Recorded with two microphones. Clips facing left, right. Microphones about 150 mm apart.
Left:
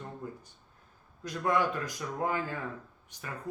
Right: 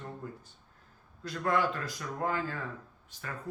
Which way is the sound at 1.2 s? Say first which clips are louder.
Left 1 dB; 15° left (ahead or behind).